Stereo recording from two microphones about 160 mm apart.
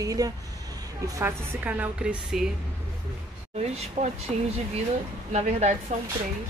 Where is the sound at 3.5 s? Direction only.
40° right (ahead or behind).